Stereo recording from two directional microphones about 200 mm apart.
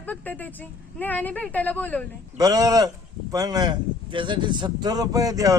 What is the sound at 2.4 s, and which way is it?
Speech, 15° right (ahead or behind).